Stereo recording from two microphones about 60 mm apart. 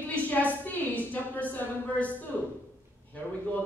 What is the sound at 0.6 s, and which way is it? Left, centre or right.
A woman's voice, left.